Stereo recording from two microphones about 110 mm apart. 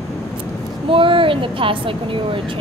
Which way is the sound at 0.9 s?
50° right (ahead or behind).